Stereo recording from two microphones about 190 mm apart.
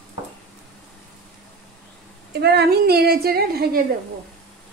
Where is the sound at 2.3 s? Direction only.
60° right (ahead or behind).